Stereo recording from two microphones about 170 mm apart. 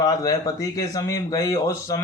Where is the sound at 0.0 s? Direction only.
20° left (ahead or behind).